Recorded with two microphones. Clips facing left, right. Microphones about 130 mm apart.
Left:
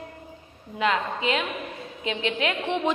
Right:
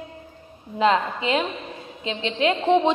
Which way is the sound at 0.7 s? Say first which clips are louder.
Right 5 dB; 30° right (ahead or behind).